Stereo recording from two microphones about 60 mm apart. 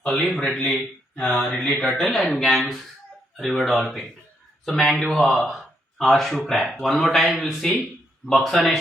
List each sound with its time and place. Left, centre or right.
0.1 s speech: centre
1.1 s mantra: centre
1.5 s speech: centre